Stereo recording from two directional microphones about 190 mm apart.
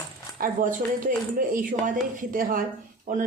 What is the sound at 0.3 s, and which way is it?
Speech, 45° right (ahead or behind).